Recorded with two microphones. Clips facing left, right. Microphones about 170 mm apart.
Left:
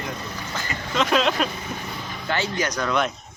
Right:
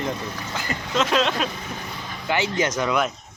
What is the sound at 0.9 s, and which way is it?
Speech, centre (ahead or behind).